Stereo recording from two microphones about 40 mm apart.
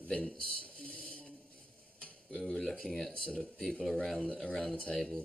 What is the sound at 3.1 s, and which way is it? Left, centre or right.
Speech, left.